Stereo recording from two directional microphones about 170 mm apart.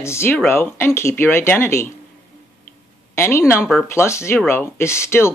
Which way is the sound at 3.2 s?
15° left (ahead or behind).